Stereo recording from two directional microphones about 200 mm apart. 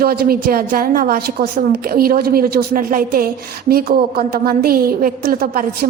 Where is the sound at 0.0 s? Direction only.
50° right (ahead or behind).